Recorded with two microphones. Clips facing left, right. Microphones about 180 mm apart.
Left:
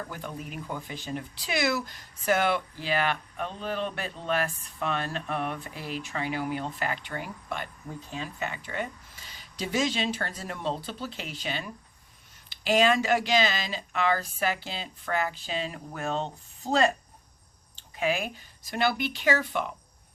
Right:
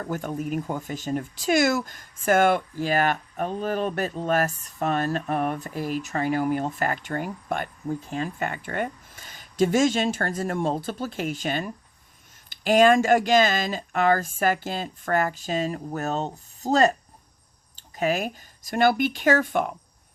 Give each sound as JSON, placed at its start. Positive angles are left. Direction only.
{"t": 0.0, "sound": "speech", "side_deg": -45}